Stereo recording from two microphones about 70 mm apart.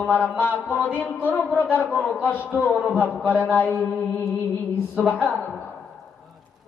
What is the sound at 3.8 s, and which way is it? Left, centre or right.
Mantra, centre.